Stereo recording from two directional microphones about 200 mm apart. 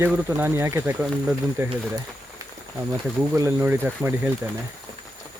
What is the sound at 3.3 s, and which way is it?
Speech, 15° right (ahead or behind).